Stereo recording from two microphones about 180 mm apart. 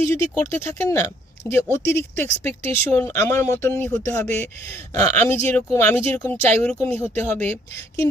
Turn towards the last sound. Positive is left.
turn(degrees=10)  # may be behind; listen again after turning